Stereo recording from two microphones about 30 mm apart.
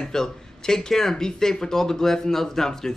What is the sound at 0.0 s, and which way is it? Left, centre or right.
A man's voice, centre.